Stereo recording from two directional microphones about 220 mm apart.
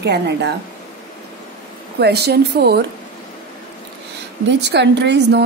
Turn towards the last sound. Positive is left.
turn(degrees=-50)  # may be behind; listen again after turning